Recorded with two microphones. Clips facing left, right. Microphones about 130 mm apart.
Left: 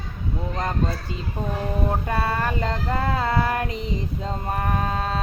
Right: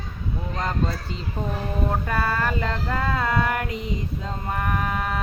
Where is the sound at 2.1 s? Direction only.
25° left (ahead or behind).